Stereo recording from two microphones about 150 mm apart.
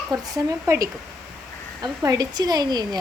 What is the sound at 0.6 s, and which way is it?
Speech, 20° right (ahead or behind).